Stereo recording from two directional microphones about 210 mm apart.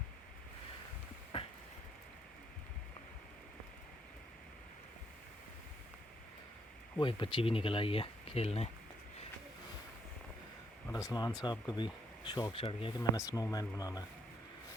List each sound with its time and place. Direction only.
1.3 s a sound: 25° left (ahead or behind)
7.0 s speech: 25° left (ahead or behind)
10.8 s speech: 15° left (ahead or behind)